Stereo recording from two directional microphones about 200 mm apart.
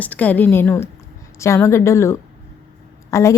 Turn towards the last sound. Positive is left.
turn(degrees=15)  # may be behind; listen again after turning